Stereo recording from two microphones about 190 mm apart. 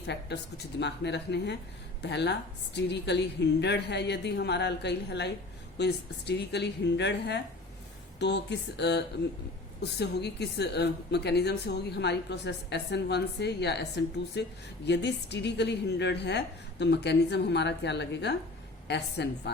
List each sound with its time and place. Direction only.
0.1 s a woman's voice: 65° left (ahead or behind)